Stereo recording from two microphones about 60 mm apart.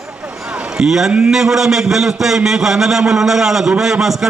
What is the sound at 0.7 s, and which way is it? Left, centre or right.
A man's voice, centre.